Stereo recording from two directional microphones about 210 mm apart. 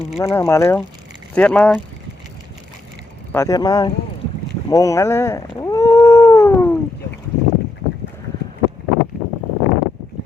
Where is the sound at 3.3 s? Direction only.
15° left (ahead or behind).